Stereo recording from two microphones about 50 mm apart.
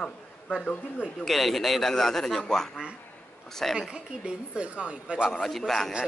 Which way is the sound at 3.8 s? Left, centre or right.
Centre.